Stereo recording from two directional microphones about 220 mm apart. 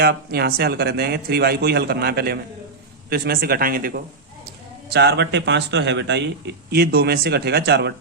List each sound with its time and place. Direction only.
0.0 s speech: 45° right (ahead or behind)